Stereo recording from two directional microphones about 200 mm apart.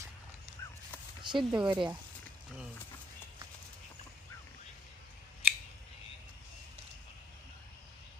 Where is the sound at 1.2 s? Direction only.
25° right (ahead or behind).